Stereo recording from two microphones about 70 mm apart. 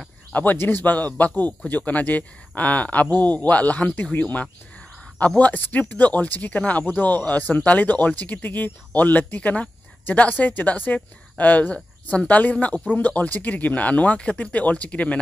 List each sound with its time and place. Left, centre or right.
0.3 s speech: left